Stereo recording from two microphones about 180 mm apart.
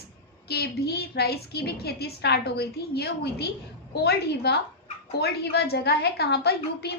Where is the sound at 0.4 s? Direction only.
65° left (ahead or behind).